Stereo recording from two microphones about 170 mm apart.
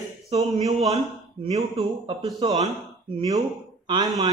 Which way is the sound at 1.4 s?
35° right (ahead or behind).